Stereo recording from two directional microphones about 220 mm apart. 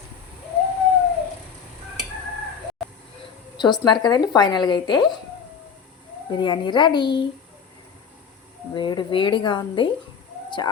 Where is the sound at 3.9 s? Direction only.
20° left (ahead or behind).